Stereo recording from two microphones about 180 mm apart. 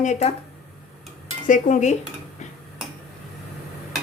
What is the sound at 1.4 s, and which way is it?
Speech, 45° left (ahead or behind).